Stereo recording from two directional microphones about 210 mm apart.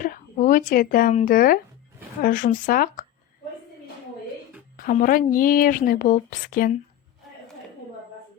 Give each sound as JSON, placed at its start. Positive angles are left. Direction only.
{"t": 0.0, "sound": "speech", "side_deg": 40}
{"t": 4.8, "sound": "speech", "side_deg": 40}